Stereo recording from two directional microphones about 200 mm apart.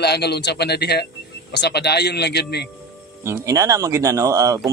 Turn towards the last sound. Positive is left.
turn(degrees=-15)  # may be behind; listen again after turning